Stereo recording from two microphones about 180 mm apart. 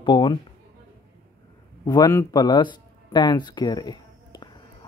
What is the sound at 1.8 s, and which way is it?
Speech, 20° left (ahead or behind).